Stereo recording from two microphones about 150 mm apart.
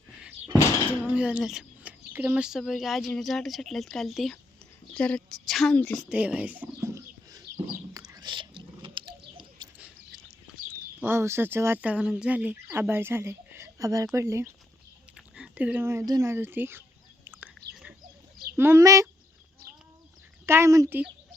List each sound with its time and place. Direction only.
0.2 s a sound: 10° right (ahead or behind)
1.0 s a woman's voice: 10° right (ahead or behind); by 6.1 s 10° left (ahead or behind)
6.1 s a sound: 10° right (ahead or behind)
7.9 s chewing: 25° right (ahead or behind)
9.6 s a sound: 25° right (ahead or behind)
10.7 s speech: 15° right (ahead or behind)
15.1 s speech: 5° right (ahead or behind)
17.2 s whispering: 15° right (ahead or behind)
18.5 s speech: 15° right (ahead or behind)
20.5 s speech: 20° right (ahead or behind)